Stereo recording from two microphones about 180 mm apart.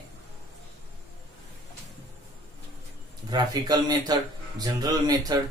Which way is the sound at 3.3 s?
20° right (ahead or behind).